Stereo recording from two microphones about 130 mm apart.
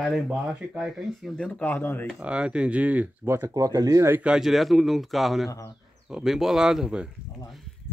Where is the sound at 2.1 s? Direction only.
10° right (ahead or behind); by 4.1 s 25° right (ahead or behind).